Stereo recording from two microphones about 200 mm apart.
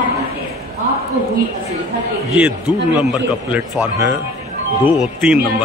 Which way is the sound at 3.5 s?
10° right (ahead or behind).